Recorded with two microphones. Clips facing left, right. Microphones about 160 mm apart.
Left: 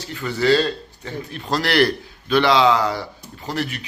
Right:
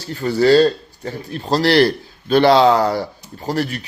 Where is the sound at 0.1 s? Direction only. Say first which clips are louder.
Right 5 dB; 40° right (ahead or behind).